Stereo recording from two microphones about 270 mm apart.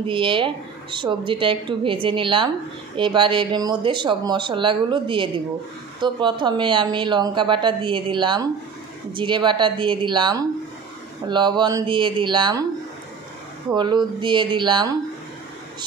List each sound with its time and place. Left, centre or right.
0.0 s a woman's voice: centre
13.7 s speech: centre